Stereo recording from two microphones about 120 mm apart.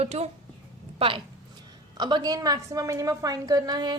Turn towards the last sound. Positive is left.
turn(degrees=-35)  # may be behind; listen again after turning